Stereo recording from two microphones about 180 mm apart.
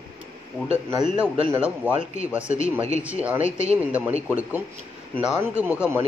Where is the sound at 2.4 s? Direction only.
40° left (ahead or behind).